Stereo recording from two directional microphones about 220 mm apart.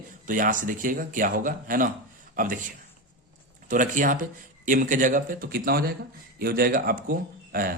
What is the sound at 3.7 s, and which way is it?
Speech, 35° right (ahead or behind).